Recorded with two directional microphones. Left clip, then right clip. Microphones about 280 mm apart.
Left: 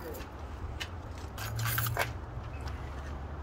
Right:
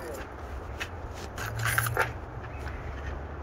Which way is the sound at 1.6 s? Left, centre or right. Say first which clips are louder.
Right 8 dB; left.